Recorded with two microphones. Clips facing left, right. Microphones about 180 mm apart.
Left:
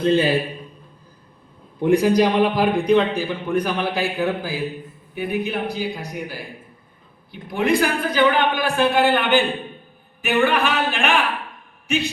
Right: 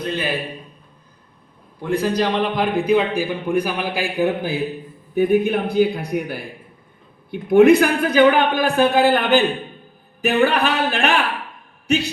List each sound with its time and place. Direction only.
0.0 s a man's voice: 30° left (ahead or behind)
1.8 s a man's voice: 15° left (ahead or behind); by 4.6 s 20° right (ahead or behind)
5.1 s a man's voice: 45° right (ahead or behind)